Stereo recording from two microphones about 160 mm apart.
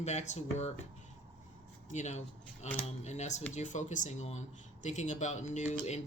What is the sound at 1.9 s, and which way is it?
Speech, 45° left (ahead or behind).